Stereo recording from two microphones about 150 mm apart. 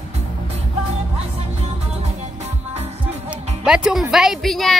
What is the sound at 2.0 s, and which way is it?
Music, 45° right (ahead or behind).